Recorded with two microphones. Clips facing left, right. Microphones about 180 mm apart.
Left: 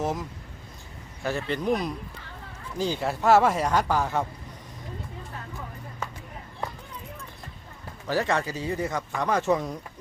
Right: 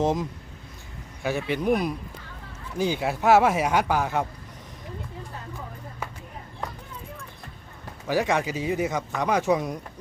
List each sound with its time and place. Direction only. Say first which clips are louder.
0.0 s speech: right 5 dB; 20° right (ahead or behind)
1.4 s speech: right 3 dB; 10° right (ahead or behind)
3.0 s speech: right 1 dB; centre (ahead or behind)
8.0 s speech: right 2 dB; 15° right (ahead or behind)